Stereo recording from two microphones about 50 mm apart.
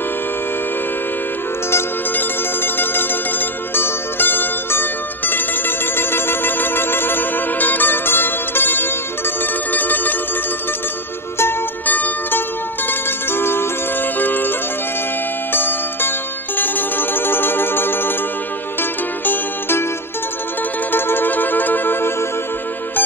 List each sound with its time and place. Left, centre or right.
2.1 s music: left
3.7 s zither: left
9.7 s music: left
11.8 s zither: left
13.3 s music: left
15.5 s zither: left
16.5 s music: left
20.9 s music: left